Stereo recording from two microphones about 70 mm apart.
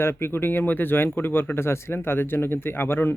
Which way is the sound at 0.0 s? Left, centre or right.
Left.